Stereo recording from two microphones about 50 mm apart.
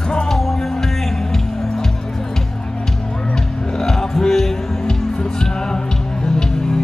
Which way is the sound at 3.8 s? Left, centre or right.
Centre.